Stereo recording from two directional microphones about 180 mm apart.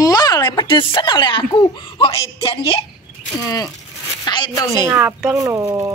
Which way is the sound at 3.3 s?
20° left (ahead or behind).